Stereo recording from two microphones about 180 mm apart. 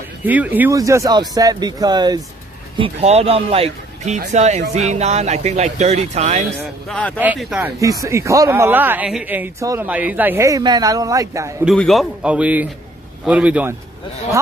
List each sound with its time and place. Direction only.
0.2 s speech: 10° right (ahead or behind)
2.8 s speech: 35° right (ahead or behind)
6.9 s a man's voice: 5° left (ahead or behind)
7.3 s a man's voice: 5° right (ahead or behind)
7.8 s speech: 20° right (ahead or behind)
11.6 s a man's voice: centre (ahead or behind)